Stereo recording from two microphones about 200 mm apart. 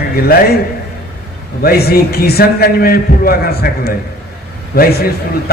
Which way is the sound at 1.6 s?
50° left (ahead or behind).